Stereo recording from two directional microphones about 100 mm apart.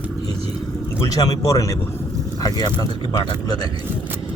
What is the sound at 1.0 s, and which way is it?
Speech, 40° left (ahead or behind).